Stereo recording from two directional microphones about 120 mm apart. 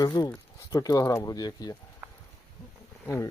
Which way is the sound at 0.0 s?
30° left (ahead or behind).